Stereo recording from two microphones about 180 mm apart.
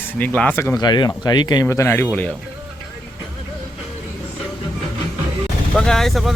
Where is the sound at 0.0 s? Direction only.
10° left (ahead or behind).